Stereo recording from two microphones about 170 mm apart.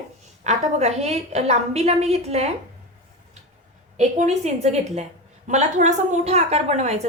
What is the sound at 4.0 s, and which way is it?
Speech, 45° right (ahead or behind).